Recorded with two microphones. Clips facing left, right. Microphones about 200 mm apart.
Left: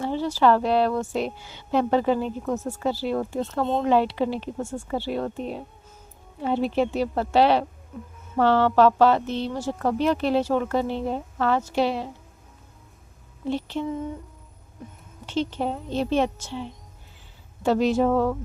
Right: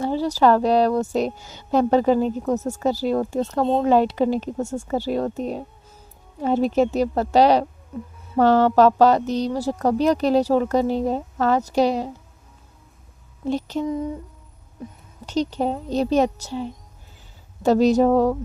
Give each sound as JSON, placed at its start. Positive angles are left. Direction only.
{"t": 0.0, "sound": "speech", "side_deg": -40}
{"t": 13.5, "sound": "speech", "side_deg": -40}
{"t": 15.3, "sound": "speech", "side_deg": -40}